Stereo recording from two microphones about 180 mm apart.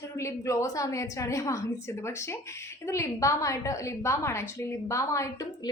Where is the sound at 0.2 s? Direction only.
15° left (ahead or behind).